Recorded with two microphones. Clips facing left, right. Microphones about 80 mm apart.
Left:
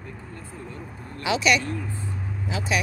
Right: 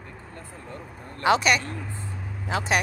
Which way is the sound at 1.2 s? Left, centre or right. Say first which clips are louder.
Right 2 dB; right.